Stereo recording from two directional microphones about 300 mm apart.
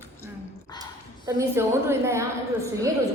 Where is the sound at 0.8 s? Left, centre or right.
Centre.